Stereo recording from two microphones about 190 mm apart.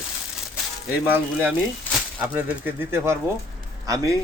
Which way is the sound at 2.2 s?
10° right (ahead or behind).